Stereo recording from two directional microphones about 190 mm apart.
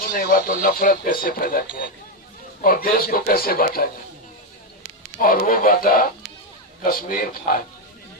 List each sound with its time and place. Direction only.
0.0 s speech: 50° left (ahead or behind)
2.6 s speech: 50° left (ahead or behind)
5.2 s speech: 50° left (ahead or behind)